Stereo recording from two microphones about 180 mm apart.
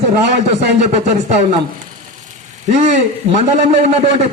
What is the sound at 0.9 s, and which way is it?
Speech, 40° right (ahead or behind).